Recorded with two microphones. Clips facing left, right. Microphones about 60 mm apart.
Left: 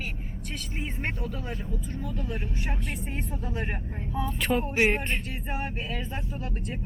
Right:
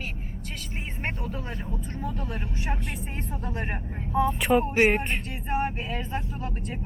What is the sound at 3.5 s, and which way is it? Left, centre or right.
Speech, right.